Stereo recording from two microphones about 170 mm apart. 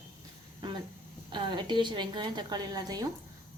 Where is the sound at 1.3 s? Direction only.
30° right (ahead or behind).